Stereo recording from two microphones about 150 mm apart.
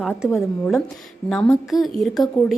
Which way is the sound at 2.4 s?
5° left (ahead or behind).